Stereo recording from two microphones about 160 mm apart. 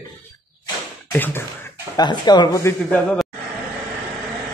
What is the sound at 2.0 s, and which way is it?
Speech, 25° left (ahead or behind).